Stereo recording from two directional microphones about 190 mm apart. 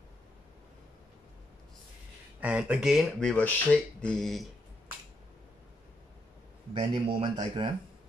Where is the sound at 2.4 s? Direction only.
5° right (ahead or behind).